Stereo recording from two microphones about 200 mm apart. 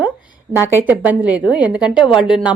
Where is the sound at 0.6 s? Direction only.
10° right (ahead or behind).